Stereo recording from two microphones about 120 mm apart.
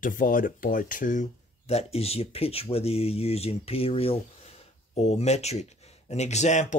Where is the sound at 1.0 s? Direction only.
90° left.